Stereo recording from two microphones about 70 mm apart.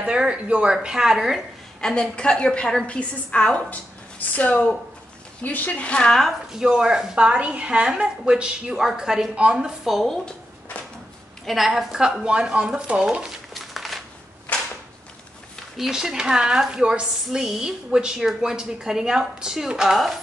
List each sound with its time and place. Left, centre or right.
0.0 s speech: centre
1.8 s a woman's voice: centre
6.5 s a woman's voice: centre
11.4 s speech: centre
13.5 s a sound: centre
14.5 s a sound: left
15.8 s speech: centre